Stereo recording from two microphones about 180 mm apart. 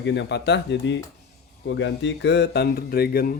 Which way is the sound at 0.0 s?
75° left (ahead or behind).